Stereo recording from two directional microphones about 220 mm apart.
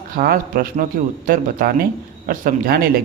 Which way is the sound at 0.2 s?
40° right (ahead or behind).